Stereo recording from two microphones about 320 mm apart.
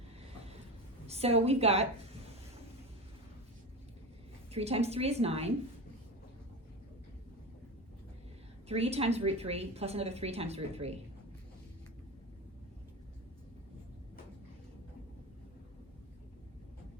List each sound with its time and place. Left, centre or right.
1.0 s a woman's voice: centre
4.5 s a woman's voice: centre
8.6 s a woman's voice: centre